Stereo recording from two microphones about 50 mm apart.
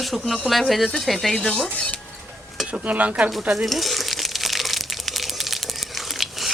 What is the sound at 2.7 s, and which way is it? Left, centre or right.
Speech, right.